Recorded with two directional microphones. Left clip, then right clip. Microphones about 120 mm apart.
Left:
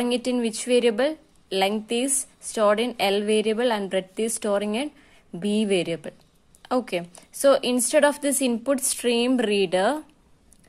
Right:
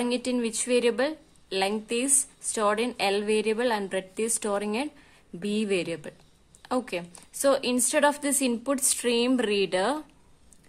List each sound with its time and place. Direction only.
0.0 s a woman's voice: 20° left (ahead or behind)